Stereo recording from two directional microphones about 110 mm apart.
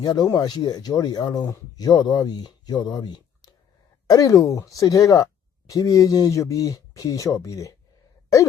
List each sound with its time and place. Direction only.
0.0 s speech: 35° left (ahead or behind)